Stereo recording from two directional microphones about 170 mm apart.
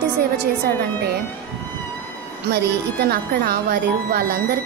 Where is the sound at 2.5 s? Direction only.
70° right (ahead or behind).